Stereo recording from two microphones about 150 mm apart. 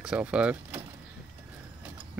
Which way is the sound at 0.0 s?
5° right (ahead or behind).